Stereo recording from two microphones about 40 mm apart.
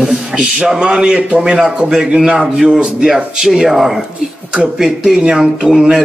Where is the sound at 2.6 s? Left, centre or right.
Right.